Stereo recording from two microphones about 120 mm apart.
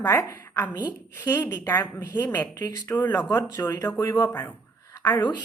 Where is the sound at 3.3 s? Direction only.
20° left (ahead or behind).